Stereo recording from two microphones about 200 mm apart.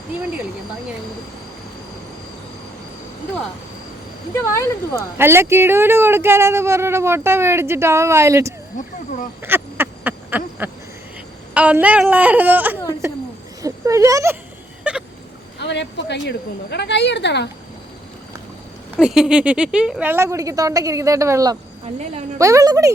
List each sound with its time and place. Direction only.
5.1 s speech: 10° right (ahead or behind)
9.4 s duck: 10° right (ahead or behind)
11.5 s speech: 5° right (ahead or behind)
14.8 s a sound: 5° right (ahead or behind)
15.5 s a woman's voice: 60° left (ahead or behind)
18.9 s speech: 5° right (ahead or behind)
21.9 s a woman's voice: 35° right (ahead or behind)
22.4 s speech: 15° right (ahead or behind)